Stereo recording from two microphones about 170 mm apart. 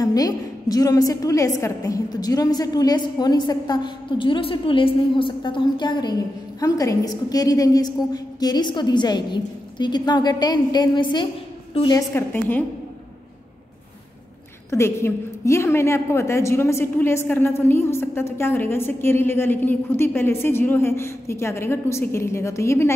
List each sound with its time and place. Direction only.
0.0 s a woman's voice: 20° left (ahead or behind)
12.1 s a woman's voice: 10° left (ahead or behind)
14.7 s a woman's voice: 15° left (ahead or behind)